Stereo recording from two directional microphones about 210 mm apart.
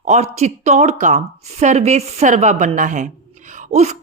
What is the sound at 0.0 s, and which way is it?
A woman's voice, 30° right (ahead or behind).